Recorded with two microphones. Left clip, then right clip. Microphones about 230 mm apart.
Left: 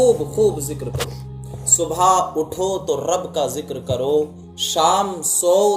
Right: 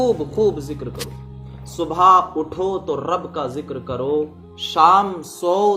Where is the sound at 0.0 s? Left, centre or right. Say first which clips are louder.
Left 2 dB; centre.